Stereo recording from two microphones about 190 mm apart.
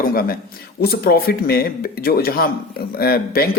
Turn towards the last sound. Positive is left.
turn(degrees=55)  # may be behind; listen again after turning